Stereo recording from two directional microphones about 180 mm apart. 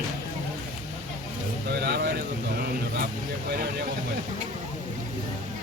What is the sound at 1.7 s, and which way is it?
Vehicle, 65° right (ahead or behind).